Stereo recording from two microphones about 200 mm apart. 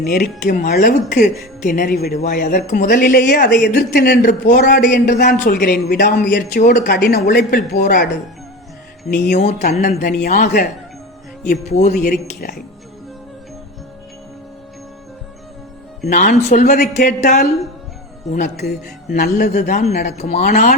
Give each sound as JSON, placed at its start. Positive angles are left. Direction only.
{"t": 0.0, "sound": "a man's voice", "side_deg": 40}
{"t": 9.0, "sound": "a man's voice", "side_deg": 45}
{"t": 16.0, "sound": "speech", "side_deg": 40}
{"t": 18.6, "sound": "a man's voice", "side_deg": 50}
{"t": 19.3, "sound": "speech", "side_deg": 35}